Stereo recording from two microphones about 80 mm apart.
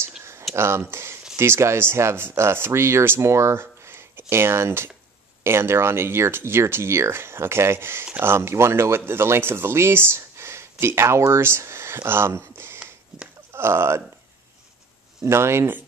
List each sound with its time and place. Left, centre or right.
0.2 s a sound: right
0.6 s speech: right
15.2 s speech: right